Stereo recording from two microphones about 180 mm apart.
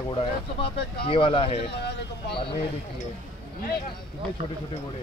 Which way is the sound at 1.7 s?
70° left (ahead or behind).